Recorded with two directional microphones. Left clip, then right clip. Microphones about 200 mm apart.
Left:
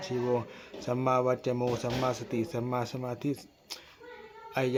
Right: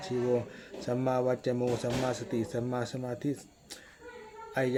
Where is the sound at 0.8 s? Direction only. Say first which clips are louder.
Left 2 dB; 5° left (ahead or behind).